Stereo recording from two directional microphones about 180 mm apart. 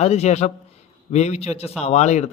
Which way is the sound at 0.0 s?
40° left (ahead or behind).